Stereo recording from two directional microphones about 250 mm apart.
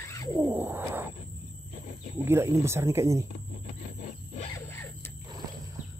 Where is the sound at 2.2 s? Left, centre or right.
Centre.